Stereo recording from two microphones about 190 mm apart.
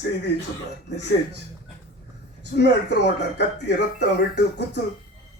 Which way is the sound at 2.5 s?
65° left (ahead or behind).